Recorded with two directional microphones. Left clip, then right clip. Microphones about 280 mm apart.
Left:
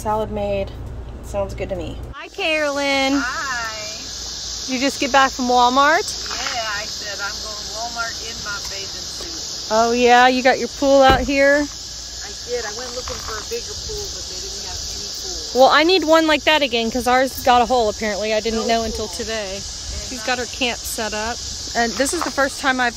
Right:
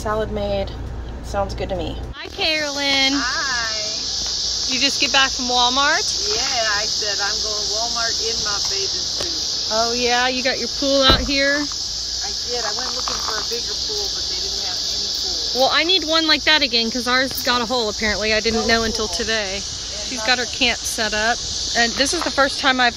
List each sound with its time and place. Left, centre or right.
2.4 s speech: centre
3.1 s a child's voice: centre
4.7 s speech: left
9.7 s speech: left; by 11.6 s centre
15.6 s speech: left
20.2 s speech: centre